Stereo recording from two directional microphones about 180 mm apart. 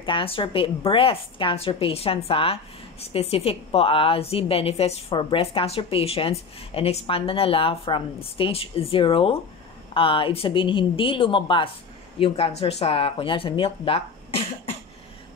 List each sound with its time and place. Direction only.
0.0 s a woman's voice: 30° left (ahead or behind)